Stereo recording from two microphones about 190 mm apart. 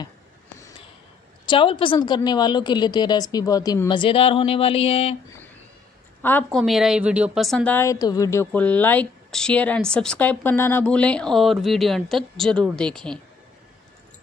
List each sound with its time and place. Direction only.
0.6 s a sound: 15° left (ahead or behind)
1.4 s a woman's voice: 25° left (ahead or behind)
6.2 s a woman's voice: 10° left (ahead or behind)
6.6 s a woman's voice: centre (ahead or behind)